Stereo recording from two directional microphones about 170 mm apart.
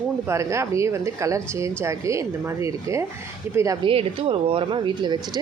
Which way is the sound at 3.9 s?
35° right (ahead or behind).